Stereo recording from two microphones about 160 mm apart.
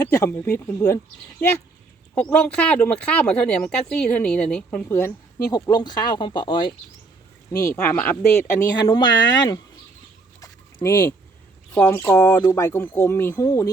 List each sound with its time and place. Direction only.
0.1 s speech: 20° left (ahead or behind)
2.1 s speech: 10° left (ahead or behind); by 6.7 s 30° left (ahead or behind)
7.5 s speech: 20° left (ahead or behind)
8.7 s speech: 25° left (ahead or behind)
10.4 s fowl: 20° left (ahead or behind)
11.9 s speech: 15° left (ahead or behind)